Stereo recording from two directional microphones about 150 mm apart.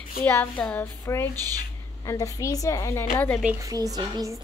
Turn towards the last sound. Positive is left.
turn(degrees=-25)  # may be behind; listen again after turning